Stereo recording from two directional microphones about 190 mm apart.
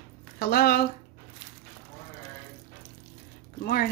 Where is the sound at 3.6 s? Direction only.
50° left (ahead or behind).